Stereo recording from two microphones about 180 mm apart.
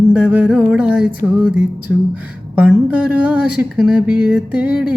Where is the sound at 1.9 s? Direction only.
5° right (ahead or behind).